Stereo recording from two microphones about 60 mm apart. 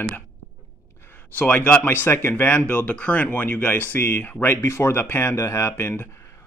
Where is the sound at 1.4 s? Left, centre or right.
Left.